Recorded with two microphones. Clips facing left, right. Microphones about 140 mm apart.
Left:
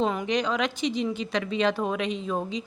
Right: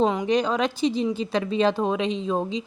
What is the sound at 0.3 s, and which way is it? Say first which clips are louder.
A woman's voice: right 4 dB; 35° right (ahead or behind).